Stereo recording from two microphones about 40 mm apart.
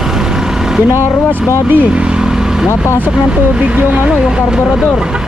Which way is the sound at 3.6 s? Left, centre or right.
Right.